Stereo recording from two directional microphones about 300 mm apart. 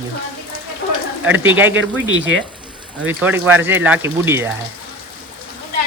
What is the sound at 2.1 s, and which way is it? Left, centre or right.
Speech, right.